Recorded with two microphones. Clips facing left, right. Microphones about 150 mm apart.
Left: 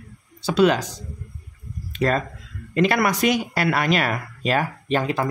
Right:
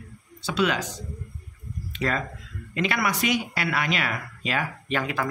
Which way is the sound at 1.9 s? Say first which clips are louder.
Left 6 dB; 40° left (ahead or behind).